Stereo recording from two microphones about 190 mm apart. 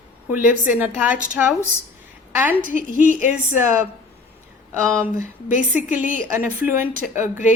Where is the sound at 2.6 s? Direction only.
45° right (ahead or behind).